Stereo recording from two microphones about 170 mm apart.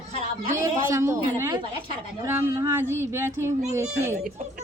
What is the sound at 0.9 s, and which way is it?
Speech, 15° right (ahead or behind).